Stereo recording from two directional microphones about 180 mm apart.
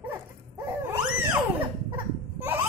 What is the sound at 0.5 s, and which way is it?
Dog, 15° right (ahead or behind).